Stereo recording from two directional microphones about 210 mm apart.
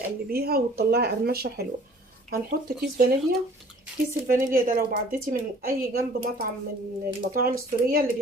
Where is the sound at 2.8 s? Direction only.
45° right (ahead or behind).